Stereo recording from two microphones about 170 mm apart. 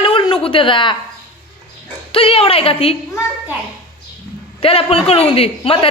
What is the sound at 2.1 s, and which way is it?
Speech, 30° left (ahead or behind).